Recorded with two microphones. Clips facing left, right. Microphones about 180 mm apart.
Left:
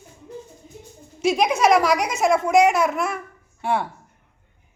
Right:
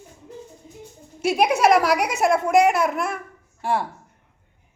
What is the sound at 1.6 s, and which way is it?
Speech, 5° right (ahead or behind).